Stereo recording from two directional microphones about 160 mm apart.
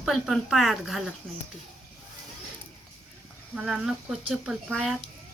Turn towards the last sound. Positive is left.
turn(degrees=0)  # may be behind; listen again after turning